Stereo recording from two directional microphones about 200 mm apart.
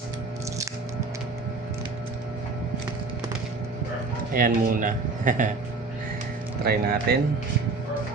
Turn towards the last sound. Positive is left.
turn(degrees=-50)  # may be behind; listen again after turning